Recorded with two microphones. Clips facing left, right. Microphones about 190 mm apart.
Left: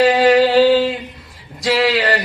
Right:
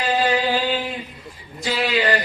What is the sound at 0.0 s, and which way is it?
Mantra, 75° left (ahead or behind).